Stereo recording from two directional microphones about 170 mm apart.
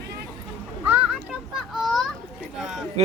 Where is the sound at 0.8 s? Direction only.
10° right (ahead or behind).